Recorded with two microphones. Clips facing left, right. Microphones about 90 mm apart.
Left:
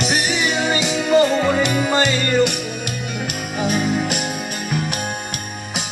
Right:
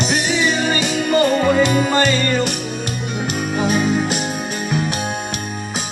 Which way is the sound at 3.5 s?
40° right (ahead or behind).